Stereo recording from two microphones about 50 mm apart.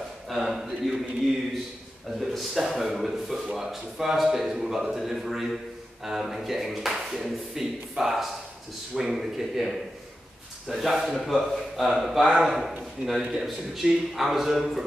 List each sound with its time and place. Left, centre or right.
0.3 s speech: centre
2.1 s speech: centre